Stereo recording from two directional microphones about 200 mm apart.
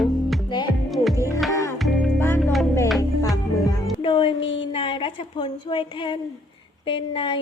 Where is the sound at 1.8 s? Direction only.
Centre (ahead or behind).